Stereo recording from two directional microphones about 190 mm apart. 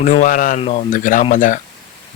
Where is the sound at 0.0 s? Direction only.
45° left (ahead or behind).